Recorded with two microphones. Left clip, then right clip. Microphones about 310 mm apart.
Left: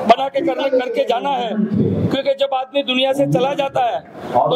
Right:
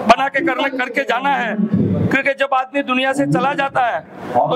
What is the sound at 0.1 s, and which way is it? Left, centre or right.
Speech, right.